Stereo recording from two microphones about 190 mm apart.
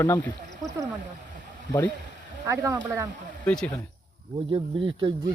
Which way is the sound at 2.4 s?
15° right (ahead or behind).